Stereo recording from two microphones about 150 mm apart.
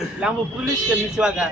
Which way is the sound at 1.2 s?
10° right (ahead or behind).